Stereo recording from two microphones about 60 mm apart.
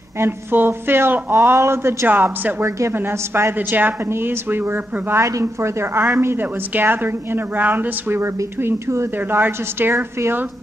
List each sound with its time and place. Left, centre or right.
0.2 s a woman's voice: right
5.4 s speech: right
6.4 s a woman's voice: right
8.5 s speech: right
9.1 s a woman's voice: right
9.9 s speech: right